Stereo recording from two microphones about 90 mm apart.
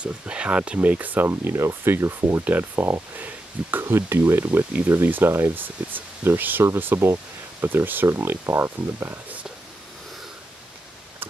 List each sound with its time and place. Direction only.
0.0 s speech: 10° right (ahead or behind); by 9.2 s 30° right (ahead or behind)